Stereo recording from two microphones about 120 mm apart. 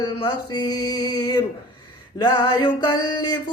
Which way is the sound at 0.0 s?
35° left (ahead or behind).